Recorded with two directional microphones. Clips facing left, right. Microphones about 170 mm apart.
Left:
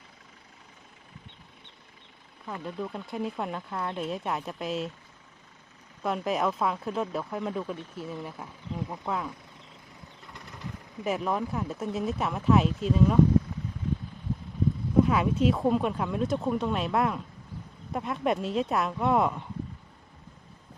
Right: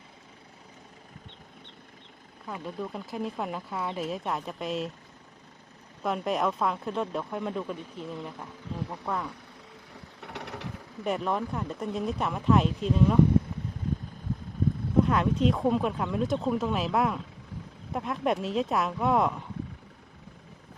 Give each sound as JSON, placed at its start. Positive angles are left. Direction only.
{"t": 2.5, "sound": "speech", "side_deg": 0}
{"t": 6.0, "sound": "speech", "side_deg": 0}
{"t": 10.2, "sound": "a sound", "side_deg": -70}
{"t": 11.0, "sound": "speech", "side_deg": 0}
{"t": 15.0, "sound": "speech", "side_deg": 5}